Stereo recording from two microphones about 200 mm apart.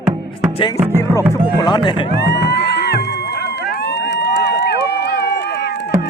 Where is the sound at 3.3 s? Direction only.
55° left (ahead or behind).